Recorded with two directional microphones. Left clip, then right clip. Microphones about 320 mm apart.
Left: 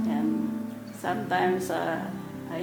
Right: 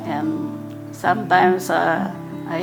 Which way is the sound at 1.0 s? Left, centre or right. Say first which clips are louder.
Right 11 dB; right.